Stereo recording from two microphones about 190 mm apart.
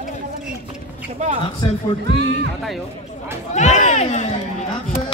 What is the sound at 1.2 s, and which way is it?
Speech, 35° right (ahead or behind).